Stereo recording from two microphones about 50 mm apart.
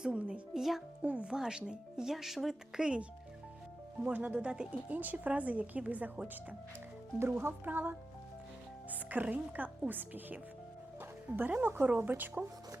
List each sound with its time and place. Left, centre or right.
0.2 s speech: right
0.5 s a child's voice: centre
1.0 s a woman's voice: right
1.3 s speech: centre
4.0 s speech: right
4.4 s a woman's voice: centre
7.3 s speech: right
8.9 s speech: right